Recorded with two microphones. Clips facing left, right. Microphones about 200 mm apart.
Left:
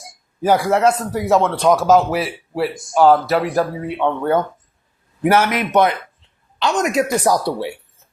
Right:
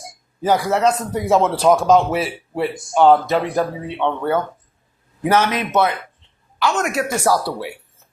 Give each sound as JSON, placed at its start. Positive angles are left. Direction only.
{"t": 0.4, "sound": "a man's voice", "side_deg": 15}